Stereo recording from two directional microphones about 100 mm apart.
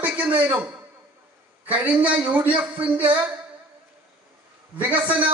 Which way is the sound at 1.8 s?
15° right (ahead or behind).